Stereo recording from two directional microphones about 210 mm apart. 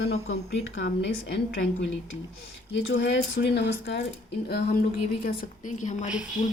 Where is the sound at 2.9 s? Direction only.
55° left (ahead or behind).